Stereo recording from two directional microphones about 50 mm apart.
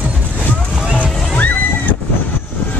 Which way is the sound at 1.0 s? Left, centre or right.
Left.